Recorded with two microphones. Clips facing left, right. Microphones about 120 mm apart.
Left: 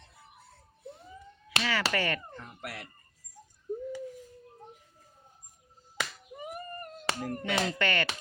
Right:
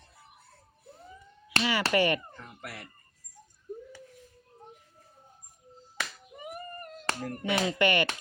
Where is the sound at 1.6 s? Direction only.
15° right (ahead or behind).